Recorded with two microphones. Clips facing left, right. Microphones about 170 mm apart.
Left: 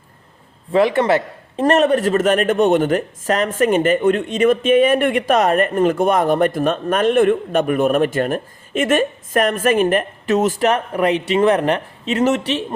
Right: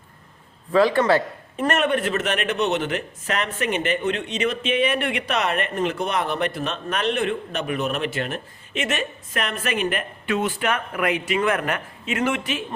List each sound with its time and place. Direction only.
0.7 s a man's voice: 20° left (ahead or behind)
1.5 s a man's voice: 35° left (ahead or behind)